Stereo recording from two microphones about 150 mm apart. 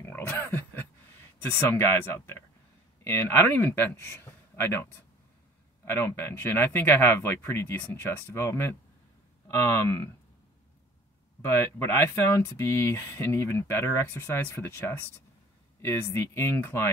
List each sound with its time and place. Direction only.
0.1 s a sound: 15° left (ahead or behind)
1.4 s speech: 15° left (ahead or behind)
11.4 s speech: 15° left (ahead or behind)